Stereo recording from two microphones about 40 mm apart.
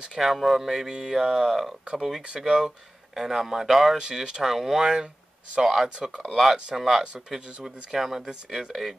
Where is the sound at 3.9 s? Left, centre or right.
Centre.